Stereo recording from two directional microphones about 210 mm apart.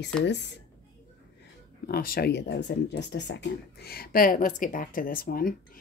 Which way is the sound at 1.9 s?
45° left (ahead or behind).